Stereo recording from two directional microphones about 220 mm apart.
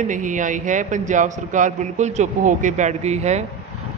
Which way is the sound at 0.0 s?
35° right (ahead or behind).